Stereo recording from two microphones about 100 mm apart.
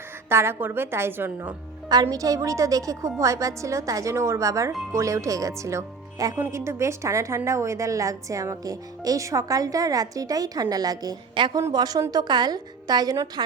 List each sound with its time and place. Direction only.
0.3 s a woman's voice: 25° right (ahead or behind)
1.9 s a woman's voice: 40° right (ahead or behind)
6.3 s a woman's voice: 25° right (ahead or behind); by 11.2 s 40° right (ahead or behind)
11.3 s a woman's voice: 50° right (ahead or behind)